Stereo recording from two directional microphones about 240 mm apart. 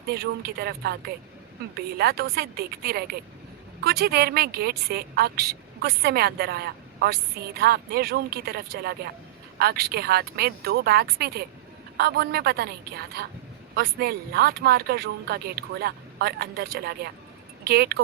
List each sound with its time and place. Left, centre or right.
0.1 s speech: right